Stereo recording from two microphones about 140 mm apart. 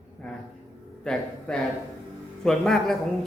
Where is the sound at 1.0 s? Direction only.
5° left (ahead or behind).